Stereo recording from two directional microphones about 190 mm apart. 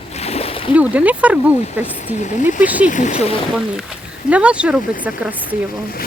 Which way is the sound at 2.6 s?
10° right (ahead or behind).